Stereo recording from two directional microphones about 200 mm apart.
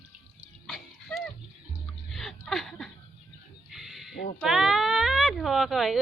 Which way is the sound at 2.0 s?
Centre (ahead or behind).